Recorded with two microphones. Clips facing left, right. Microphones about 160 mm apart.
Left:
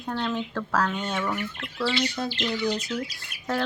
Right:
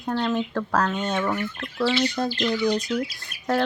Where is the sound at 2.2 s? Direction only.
15° right (ahead or behind).